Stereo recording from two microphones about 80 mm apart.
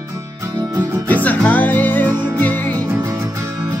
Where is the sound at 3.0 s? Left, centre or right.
Right.